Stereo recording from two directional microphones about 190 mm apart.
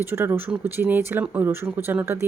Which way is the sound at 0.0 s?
10° right (ahead or behind).